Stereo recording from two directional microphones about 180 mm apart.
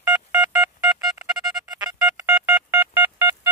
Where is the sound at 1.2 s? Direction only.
20° right (ahead or behind).